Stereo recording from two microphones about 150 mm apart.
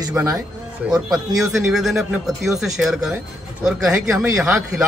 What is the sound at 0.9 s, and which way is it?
A man's voice, 5° right (ahead or behind).